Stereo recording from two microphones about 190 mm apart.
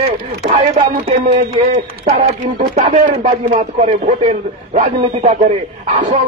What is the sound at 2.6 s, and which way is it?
A man's voice, 45° right (ahead or behind).